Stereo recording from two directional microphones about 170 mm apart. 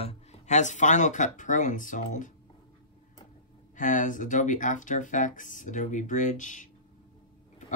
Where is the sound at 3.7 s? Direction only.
50° left (ahead or behind).